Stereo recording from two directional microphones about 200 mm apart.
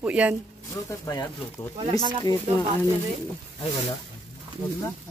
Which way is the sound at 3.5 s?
25° left (ahead or behind).